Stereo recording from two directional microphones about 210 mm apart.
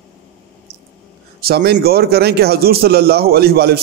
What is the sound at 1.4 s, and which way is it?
A man's voice, 50° right (ahead or behind).